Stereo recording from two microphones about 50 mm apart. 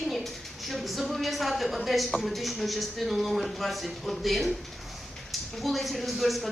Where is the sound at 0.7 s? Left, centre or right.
Centre.